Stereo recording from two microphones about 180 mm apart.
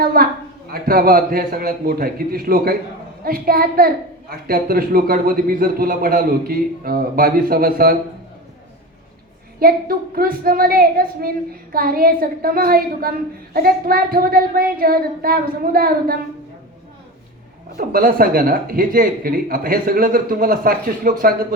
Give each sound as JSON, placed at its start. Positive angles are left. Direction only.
{"t": 0.0, "sound": "a man's voice", "side_deg": -55}
{"t": 9.6, "sound": "a woman's voice", "side_deg": -55}
{"t": 17.7, "sound": "speech", "side_deg": -55}